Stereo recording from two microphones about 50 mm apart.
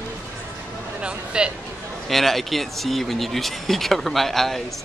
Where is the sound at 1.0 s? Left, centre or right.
Right.